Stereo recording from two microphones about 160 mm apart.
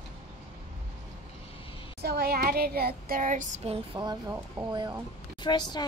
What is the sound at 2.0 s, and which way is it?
Child singing, 90° right.